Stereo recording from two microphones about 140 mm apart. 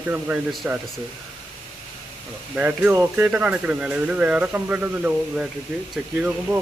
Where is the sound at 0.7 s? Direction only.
15° right (ahead or behind).